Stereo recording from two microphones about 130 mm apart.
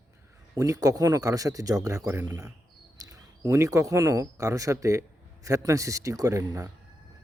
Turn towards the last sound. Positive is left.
turn(degrees=-25)  # may be behind; listen again after turning